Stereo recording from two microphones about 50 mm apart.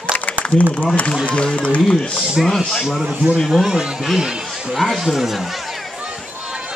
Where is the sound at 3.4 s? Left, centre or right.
Centre.